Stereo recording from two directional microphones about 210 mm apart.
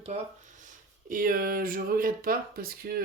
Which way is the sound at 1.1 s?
40° right (ahead or behind).